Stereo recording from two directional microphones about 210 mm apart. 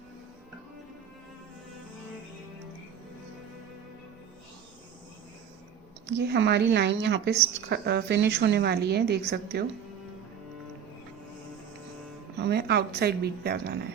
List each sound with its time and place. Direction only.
6.1 s speech: 55° right (ahead or behind)
12.4 s speech: 50° right (ahead or behind)